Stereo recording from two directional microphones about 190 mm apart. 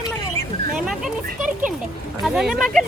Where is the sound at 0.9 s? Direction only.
5° right (ahead or behind).